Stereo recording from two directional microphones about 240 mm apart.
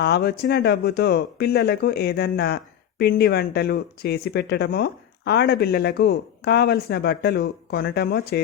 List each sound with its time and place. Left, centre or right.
0.0 s speech: left